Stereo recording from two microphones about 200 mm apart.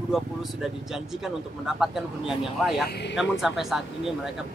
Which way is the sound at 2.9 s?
60° left (ahead or behind).